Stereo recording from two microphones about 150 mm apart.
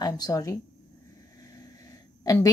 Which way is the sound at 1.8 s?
25° left (ahead or behind).